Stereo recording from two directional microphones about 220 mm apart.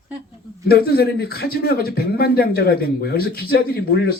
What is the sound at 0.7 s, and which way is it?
Speech, 45° left (ahead or behind).